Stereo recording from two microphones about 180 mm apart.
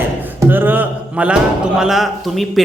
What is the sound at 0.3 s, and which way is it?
A man's voice, 10° right (ahead or behind).